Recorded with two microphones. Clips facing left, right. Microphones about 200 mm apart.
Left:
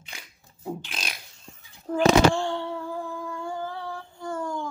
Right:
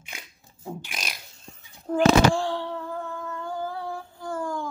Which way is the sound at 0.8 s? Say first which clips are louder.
Even; 10° right (ahead or behind).